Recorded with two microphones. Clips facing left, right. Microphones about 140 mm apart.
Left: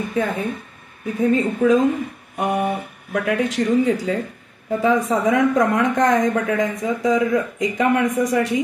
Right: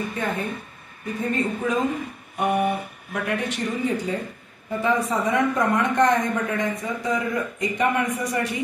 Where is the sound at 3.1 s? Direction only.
90° left.